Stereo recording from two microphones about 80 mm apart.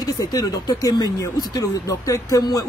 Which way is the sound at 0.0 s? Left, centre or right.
Left.